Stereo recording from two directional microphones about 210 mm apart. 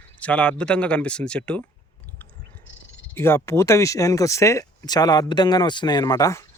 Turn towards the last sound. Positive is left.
turn(degrees=15)  # may be behind; listen again after turning